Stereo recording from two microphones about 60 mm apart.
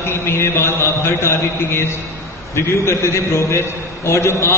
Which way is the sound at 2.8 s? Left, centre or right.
Left.